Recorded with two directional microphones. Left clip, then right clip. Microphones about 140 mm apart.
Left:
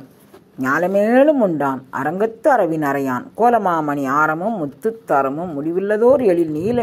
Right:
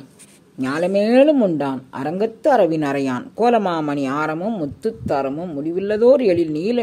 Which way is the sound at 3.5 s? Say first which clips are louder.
Left 2 dB; 15° right (ahead or behind).